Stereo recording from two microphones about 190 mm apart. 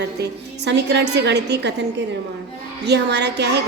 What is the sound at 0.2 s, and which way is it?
A woman's voice, 65° right (ahead or behind).